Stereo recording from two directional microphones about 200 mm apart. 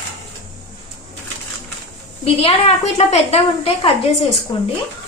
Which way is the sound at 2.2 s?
30° left (ahead or behind).